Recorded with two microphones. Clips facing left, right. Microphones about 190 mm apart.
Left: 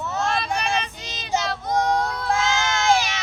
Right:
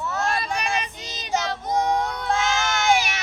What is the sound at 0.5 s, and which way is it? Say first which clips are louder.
Child singing: left 1 dB; 15° right (ahead or behind).